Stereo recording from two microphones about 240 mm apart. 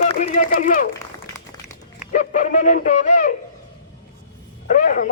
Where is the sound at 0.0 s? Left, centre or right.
Left.